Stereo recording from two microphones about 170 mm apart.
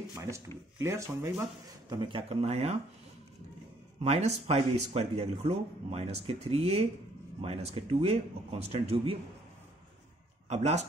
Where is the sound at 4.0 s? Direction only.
40° right (ahead or behind).